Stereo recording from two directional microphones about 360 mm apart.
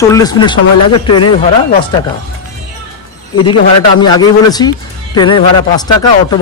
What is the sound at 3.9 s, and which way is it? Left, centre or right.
A man's voice, centre.